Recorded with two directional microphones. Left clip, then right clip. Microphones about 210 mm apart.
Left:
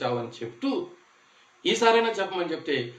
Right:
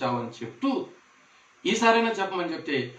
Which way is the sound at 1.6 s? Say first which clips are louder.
Left 1 dB; 55° left (ahead or behind).